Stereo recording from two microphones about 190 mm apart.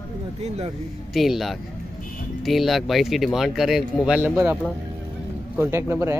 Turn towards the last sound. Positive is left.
turn(degrees=-15)  # may be behind; listen again after turning